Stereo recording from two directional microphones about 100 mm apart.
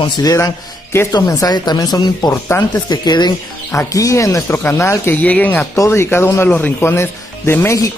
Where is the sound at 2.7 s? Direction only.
45° left (ahead or behind).